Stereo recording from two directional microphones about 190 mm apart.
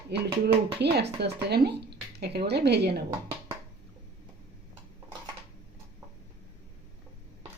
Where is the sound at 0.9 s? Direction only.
60° right (ahead or behind).